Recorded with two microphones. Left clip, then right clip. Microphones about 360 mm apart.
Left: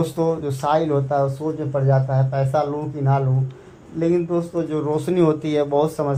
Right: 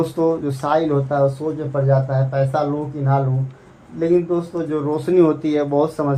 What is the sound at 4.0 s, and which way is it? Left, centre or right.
Speech, left.